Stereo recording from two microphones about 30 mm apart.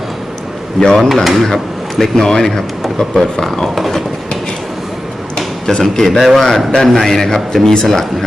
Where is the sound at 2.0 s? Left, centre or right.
Centre.